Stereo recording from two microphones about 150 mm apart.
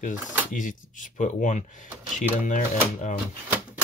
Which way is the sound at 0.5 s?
60° left (ahead or behind).